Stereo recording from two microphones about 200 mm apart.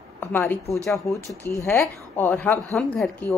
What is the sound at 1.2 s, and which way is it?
Speech, 15° right (ahead or behind).